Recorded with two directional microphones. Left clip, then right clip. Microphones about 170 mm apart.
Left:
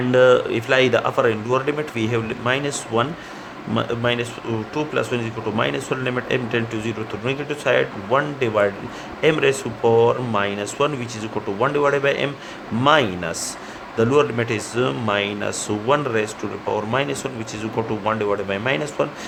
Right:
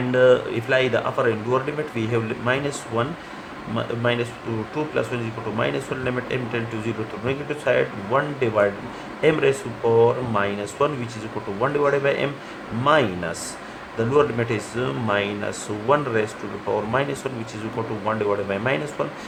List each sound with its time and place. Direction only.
0.1 s speech: 45° left (ahead or behind)